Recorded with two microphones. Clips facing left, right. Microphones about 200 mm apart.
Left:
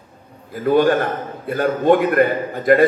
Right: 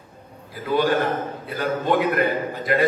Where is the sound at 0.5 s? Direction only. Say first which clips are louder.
Left 6 dB; 50° left (ahead or behind).